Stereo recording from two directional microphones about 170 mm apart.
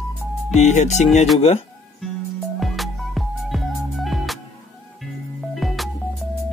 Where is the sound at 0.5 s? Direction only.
45° left (ahead or behind).